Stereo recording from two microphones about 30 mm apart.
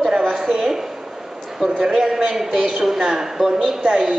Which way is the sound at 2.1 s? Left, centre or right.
Centre.